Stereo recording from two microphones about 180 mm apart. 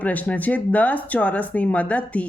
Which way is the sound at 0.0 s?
10° left (ahead or behind).